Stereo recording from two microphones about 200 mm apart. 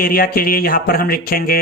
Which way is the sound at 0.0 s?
45° left (ahead or behind).